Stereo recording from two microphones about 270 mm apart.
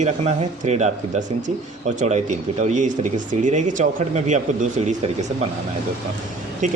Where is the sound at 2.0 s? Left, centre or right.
Right.